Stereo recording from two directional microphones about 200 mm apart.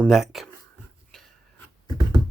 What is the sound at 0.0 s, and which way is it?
Speech, centre (ahead or behind).